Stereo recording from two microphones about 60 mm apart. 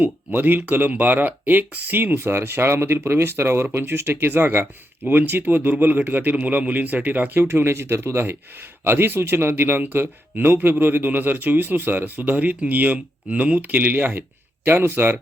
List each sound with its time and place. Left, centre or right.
0.0 s a man's voice: right
2.1 s a man's voice: right
7.4 s a man's voice: right